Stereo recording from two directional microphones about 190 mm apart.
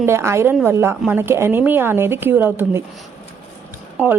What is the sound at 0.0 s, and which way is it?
A woman's voice, 15° right (ahead or behind).